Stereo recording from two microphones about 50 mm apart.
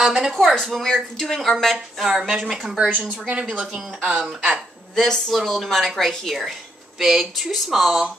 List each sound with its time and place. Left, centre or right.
0.0 s a woman's voice: centre
3.1 s a woman's voice: right
4.9 s a woman's voice: centre